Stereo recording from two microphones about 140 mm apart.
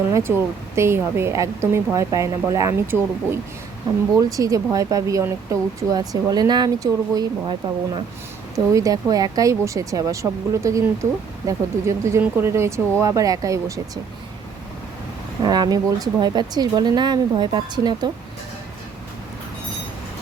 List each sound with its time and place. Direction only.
0.1 s speech: 15° right (ahead or behind)
4.2 s speech: 25° right (ahead or behind)
8.5 s speech: 25° right (ahead or behind)
15.4 s speech: 30° right (ahead or behind)